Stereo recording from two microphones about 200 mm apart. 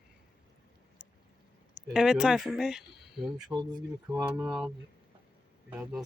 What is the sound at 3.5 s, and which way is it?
Speech, 20° right (ahead or behind).